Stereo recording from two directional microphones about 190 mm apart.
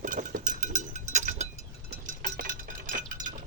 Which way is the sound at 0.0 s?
45° right (ahead or behind).